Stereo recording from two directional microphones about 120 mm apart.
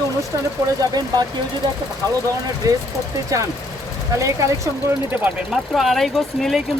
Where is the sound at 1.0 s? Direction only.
35° right (ahead or behind).